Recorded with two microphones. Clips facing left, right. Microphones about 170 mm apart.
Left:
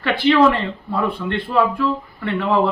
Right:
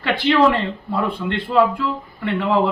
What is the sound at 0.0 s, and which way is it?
Speech, 15° right (ahead or behind).